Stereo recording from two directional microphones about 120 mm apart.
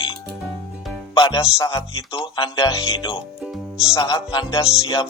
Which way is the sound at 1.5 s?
25° left (ahead or behind).